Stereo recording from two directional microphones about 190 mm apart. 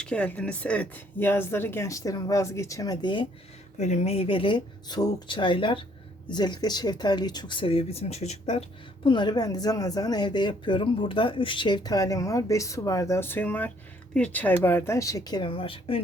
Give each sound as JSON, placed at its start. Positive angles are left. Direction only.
{"t": 0.0, "sound": "speech", "side_deg": 5}
{"t": 3.8, "sound": "speech", "side_deg": 35}
{"t": 9.0, "sound": "speech", "side_deg": 25}